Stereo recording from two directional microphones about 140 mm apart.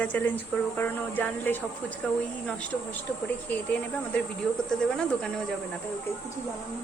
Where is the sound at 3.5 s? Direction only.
10° left (ahead or behind).